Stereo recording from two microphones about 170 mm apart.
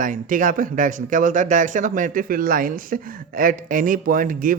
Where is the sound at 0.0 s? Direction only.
50° right (ahead or behind).